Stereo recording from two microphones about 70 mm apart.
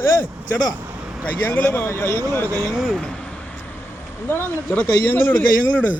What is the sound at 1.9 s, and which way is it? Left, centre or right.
Speech, left.